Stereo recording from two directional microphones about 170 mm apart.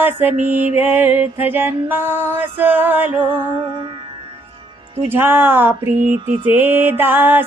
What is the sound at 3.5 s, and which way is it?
Music, 30° right (ahead or behind).